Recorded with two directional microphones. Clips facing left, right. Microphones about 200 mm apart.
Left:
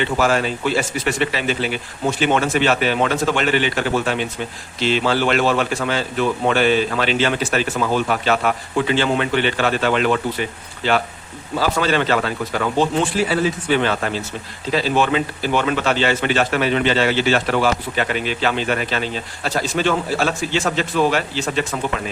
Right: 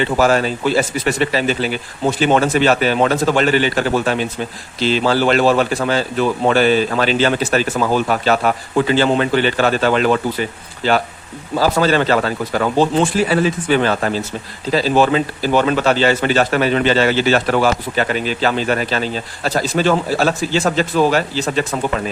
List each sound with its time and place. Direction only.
0.0 s a man's voice: 40° right (ahead or behind)
11.5 s a man's voice: 40° right (ahead or behind)